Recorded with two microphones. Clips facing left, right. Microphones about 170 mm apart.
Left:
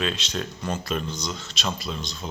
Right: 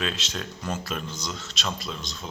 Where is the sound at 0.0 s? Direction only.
Centre (ahead or behind).